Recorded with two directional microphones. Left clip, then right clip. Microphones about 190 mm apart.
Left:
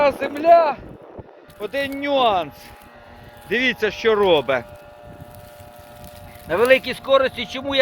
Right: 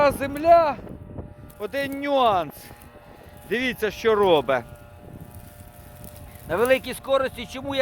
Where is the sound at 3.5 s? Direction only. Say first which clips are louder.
Left 5 dB; 30° right (ahead or behind).